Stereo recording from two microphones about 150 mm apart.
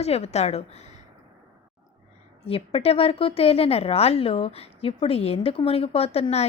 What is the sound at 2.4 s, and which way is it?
A woman's voice, 40° left (ahead or behind).